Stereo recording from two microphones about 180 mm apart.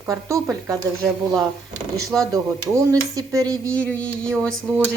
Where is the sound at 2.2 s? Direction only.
20° right (ahead or behind).